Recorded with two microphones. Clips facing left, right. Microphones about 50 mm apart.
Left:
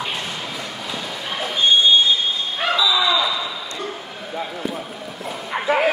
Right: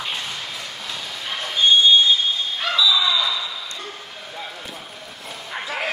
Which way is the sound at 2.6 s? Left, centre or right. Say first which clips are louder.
Left 1 dB; left.